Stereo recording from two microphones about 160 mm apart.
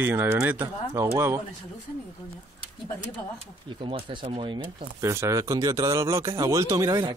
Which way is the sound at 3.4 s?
30° right (ahead or behind).